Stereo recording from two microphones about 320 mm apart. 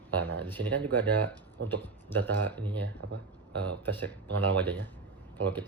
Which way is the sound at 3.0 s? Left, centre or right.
Right.